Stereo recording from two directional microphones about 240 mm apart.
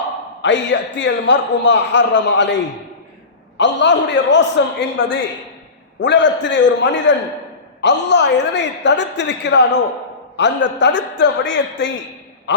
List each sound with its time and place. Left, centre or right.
0.4 s a woman's voice: left
3.6 s a woman's voice: left